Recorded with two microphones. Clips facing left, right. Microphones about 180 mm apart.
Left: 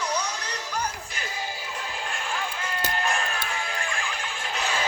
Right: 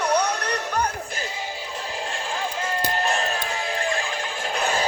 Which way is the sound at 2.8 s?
35° right (ahead or behind).